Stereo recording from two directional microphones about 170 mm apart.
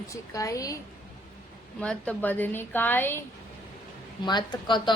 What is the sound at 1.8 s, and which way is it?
A woman's voice, 5° left (ahead or behind).